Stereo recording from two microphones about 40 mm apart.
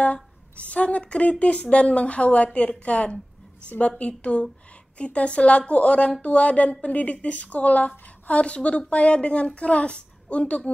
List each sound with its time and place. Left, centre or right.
0.0 s a woman's voice: left